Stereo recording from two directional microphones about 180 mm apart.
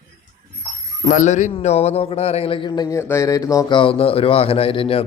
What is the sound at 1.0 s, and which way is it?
A man's voice, 45° left (ahead or behind).